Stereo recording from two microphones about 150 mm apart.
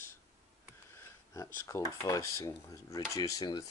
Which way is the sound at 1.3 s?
20° left (ahead or behind).